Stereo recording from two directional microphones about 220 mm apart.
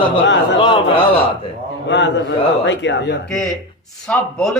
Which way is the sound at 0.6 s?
25° left (ahead or behind).